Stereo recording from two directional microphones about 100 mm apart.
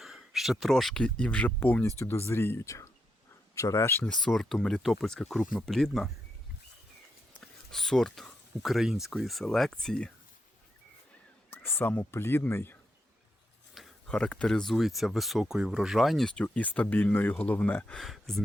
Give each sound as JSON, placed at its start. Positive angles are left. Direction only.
{"t": 0.0, "sound": "speech", "side_deg": 0}
{"t": 4.0, "sound": "speech", "side_deg": 5}
{"t": 7.4, "sound": "speech", "side_deg": 5}
{"t": 11.5, "sound": "speech", "side_deg": 20}
{"t": 13.7, "sound": "speech", "side_deg": 5}
{"t": 17.9, "sound": "speech", "side_deg": 5}